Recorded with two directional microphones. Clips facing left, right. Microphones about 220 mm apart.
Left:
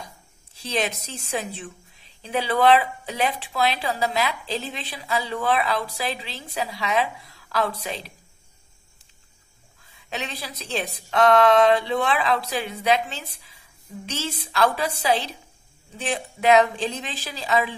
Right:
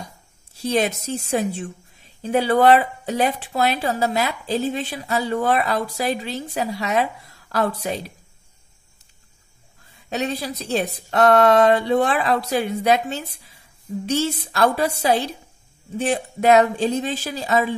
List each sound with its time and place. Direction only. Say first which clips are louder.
0.6 s speech: right 6 dB; 50° right (ahead or behind)
2.2 s a woman's voice: right 4 dB; 45° right (ahead or behind)
10.0 s a woman's voice: right 8 dB; 45° right (ahead or behind)